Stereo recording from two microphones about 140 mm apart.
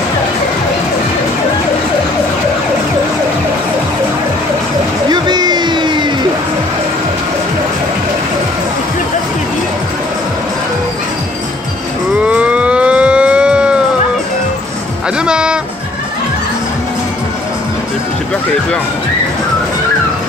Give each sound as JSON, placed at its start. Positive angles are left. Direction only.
{"t": 5.1, "sound": "music", "side_deg": -30}
{"t": 12.3, "sound": "a sound", "side_deg": -10}
{"t": 15.1, "sound": "music", "side_deg": -5}